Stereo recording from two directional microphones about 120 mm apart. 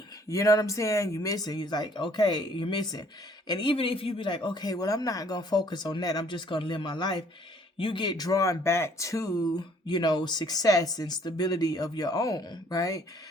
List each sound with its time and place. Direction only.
0.3 s speech: 30° left (ahead or behind)